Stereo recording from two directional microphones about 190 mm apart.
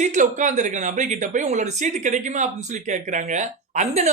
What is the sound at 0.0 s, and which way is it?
Speech, 40° right (ahead or behind).